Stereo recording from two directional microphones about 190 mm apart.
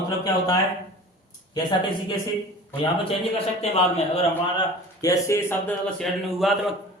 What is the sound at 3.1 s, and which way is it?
Speech, 30° left (ahead or behind).